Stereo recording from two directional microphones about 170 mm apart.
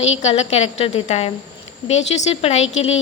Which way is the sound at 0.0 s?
40° left (ahead or behind).